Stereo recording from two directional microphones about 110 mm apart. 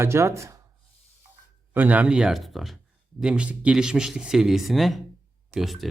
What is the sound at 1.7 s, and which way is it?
Speech, 15° right (ahead or behind).